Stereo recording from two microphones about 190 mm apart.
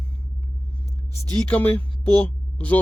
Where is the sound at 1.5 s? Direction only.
10° left (ahead or behind).